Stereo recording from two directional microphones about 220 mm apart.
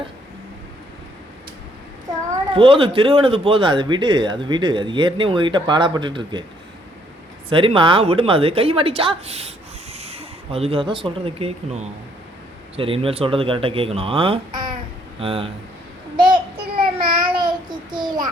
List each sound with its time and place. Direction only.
2.6 s a man's voice: 25° right (ahead or behind)
7.5 s a man's voice: 25° right (ahead or behind)
16.1 s child singing: 20° right (ahead or behind)